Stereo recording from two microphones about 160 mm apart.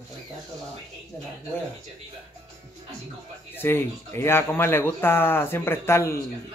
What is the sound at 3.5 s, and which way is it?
Speech, 15° left (ahead or behind).